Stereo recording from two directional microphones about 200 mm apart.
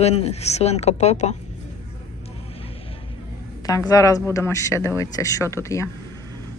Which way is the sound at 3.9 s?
15° left (ahead or behind).